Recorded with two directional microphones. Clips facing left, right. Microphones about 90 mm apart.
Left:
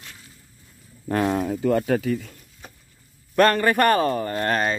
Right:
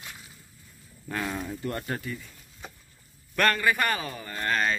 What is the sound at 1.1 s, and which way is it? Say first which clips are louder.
Speech: left 10 dB; 45° left (ahead or behind).